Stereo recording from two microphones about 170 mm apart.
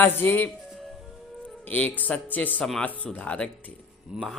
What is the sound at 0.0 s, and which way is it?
Speech, 10° left (ahead or behind).